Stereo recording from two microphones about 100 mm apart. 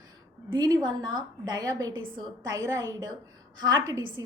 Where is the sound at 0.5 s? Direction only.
45° right (ahead or behind).